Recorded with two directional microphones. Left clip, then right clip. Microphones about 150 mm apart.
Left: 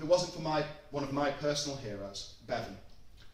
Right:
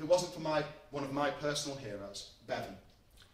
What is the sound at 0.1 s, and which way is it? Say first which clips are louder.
A man's voice: left 1 dB; 10° right (ahead or behind).